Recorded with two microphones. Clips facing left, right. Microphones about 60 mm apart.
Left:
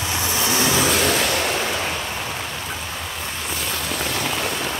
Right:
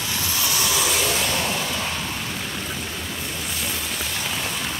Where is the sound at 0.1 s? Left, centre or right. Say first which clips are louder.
Left 4 dB; left.